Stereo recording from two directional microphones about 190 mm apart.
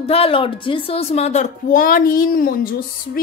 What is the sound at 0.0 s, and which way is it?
A woman's voice, 30° left (ahead or behind).